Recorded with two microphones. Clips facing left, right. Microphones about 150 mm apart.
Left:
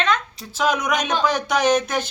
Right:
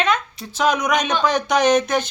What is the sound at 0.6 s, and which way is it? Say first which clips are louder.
Speech: right 2 dB; 5° left (ahead or behind).